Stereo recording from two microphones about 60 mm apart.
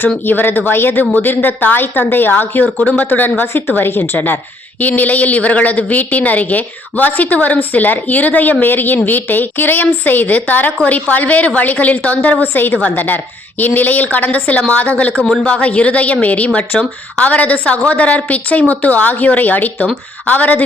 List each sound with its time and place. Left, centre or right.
0.3 s a woman's voice: left